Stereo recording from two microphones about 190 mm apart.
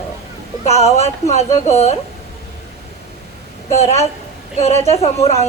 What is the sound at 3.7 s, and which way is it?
A woman's voice, 35° left (ahead or behind).